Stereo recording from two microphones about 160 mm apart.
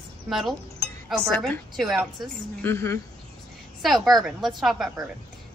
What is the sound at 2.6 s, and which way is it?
Speech, 15° left (ahead or behind).